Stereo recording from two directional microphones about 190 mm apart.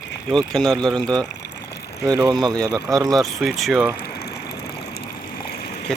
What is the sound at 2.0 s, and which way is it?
Speech, 20° right (ahead or behind).